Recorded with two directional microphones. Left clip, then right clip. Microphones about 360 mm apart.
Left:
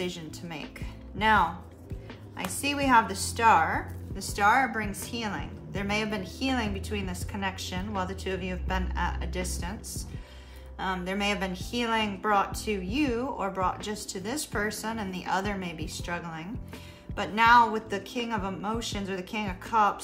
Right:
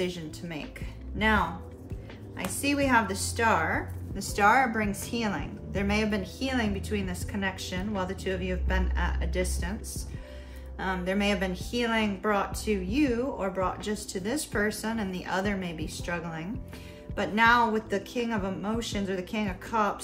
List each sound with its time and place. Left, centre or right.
0.0 s a woman's voice: centre
10.8 s a woman's voice: centre